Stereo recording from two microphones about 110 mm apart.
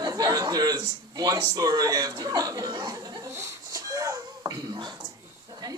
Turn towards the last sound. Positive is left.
turn(degrees=-40)  # may be behind; listen again after turning